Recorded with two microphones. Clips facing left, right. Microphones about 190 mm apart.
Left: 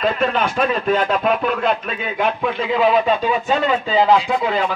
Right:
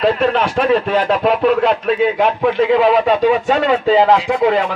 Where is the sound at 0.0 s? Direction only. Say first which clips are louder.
Right 4 dB; 75° right (ahead or behind).